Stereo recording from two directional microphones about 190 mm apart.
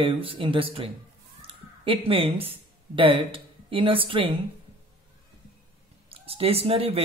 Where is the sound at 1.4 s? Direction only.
30° right (ahead or behind).